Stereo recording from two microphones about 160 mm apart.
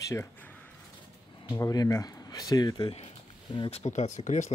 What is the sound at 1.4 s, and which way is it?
Speech, 20° left (ahead or behind).